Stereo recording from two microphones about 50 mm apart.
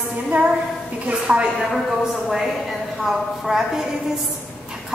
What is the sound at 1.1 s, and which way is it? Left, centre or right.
Speech, centre.